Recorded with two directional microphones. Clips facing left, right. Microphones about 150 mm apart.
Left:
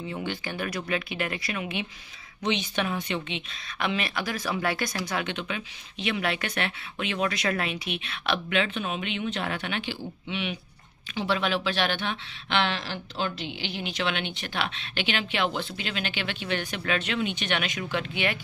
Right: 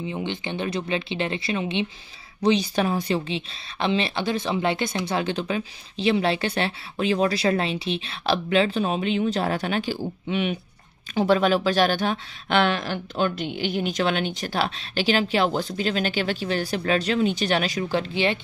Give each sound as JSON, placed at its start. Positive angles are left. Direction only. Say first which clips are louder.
{"t": 0.0, "sound": "speech", "louder": "right 4 dB", "side_deg": -20}